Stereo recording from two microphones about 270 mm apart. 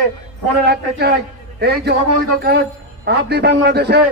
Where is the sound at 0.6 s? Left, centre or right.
Right.